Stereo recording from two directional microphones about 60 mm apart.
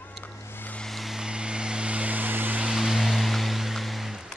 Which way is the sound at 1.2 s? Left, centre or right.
Centre.